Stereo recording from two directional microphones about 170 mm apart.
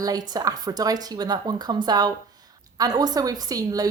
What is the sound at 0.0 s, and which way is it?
A woman's voice, 20° right (ahead or behind).